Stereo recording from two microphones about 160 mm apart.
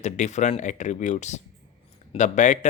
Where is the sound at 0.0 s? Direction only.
45° left (ahead or behind).